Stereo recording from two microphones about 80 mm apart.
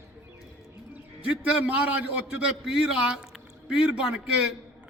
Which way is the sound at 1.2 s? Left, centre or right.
Centre.